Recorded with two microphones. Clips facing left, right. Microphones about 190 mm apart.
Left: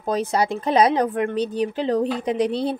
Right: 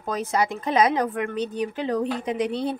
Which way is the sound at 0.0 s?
35° left (ahead or behind).